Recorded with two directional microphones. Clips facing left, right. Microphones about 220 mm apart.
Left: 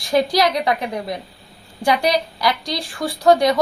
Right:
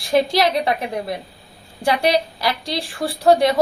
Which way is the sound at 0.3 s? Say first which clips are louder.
Even; 25° right (ahead or behind).